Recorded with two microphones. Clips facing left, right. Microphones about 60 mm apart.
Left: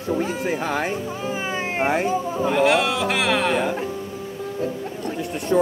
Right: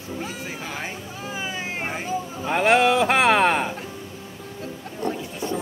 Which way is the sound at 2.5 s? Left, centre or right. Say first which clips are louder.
Right 2 dB; right.